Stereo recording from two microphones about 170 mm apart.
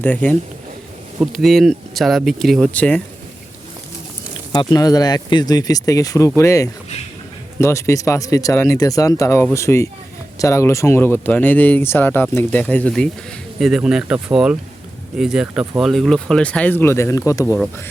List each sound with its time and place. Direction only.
0.0 s speech: 10° left (ahead or behind)
4.7 s speech: 20° left (ahead or behind)